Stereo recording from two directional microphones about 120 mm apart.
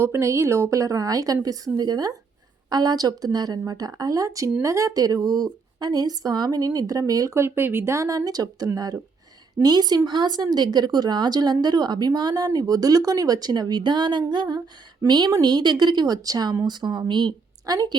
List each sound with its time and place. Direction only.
0.0 s a woman's voice: 20° right (ahead or behind)